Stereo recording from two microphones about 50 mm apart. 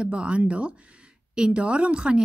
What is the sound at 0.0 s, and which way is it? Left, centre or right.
Speech, right.